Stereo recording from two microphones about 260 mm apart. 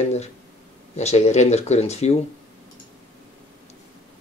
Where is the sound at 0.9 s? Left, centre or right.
Left.